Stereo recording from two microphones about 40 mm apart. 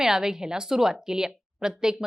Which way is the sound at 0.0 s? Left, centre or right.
Centre.